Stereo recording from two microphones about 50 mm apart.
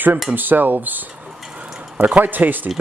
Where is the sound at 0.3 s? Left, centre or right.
Right.